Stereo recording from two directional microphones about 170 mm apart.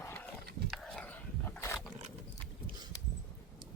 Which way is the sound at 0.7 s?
5° left (ahead or behind).